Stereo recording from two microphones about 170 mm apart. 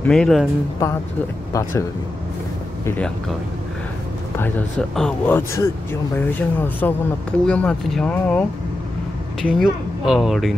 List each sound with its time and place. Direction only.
0.0 s speech: 5° left (ahead or behind)
1.5 s speech: 15° left (ahead or behind)
4.4 s speech: 10° left (ahead or behind)
9.5 s speech: centre (ahead or behind)